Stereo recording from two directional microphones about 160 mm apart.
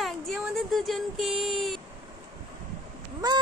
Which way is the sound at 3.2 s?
25° right (ahead or behind).